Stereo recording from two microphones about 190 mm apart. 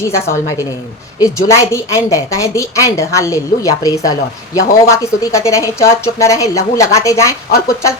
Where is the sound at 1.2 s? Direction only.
15° left (ahead or behind).